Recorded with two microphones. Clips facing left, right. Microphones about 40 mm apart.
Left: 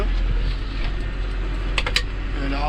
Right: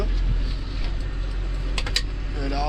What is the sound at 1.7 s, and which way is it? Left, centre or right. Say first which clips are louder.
Typing: left 5 dB; left.